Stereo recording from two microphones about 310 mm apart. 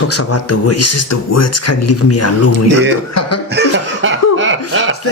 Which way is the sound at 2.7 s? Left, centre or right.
Right.